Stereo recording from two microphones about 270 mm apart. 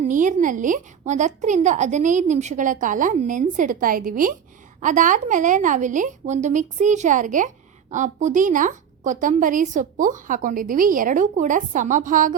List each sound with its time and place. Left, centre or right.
0.1 s a woman's voice: right